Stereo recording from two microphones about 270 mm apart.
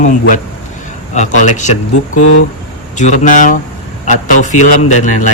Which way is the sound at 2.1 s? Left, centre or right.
Left.